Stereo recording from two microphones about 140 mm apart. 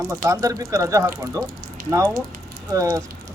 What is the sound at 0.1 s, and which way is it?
Speech, 25° right (ahead or behind).